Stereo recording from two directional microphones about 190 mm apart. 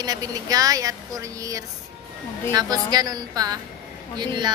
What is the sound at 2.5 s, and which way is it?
A woman's voice, 20° right (ahead or behind).